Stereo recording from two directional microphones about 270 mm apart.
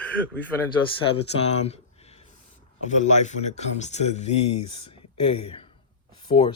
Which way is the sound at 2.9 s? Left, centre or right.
Left.